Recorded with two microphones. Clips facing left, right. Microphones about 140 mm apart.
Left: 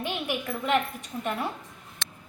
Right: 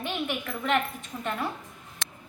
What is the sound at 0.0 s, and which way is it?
Speech, 10° left (ahead or behind).